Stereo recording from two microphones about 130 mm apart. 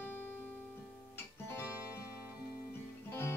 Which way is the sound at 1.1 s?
20° left (ahead or behind).